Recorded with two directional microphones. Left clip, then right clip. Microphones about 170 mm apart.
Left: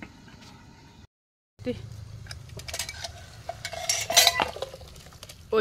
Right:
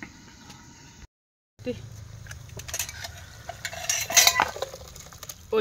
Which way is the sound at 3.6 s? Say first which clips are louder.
Even; 30° left (ahead or behind).